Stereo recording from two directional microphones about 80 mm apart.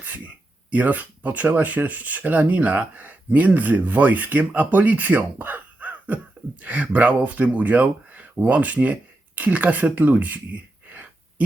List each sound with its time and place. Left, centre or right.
0.7 s speech: centre